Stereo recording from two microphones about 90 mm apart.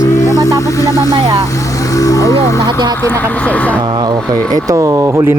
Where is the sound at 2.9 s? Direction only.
20° left (ahead or behind).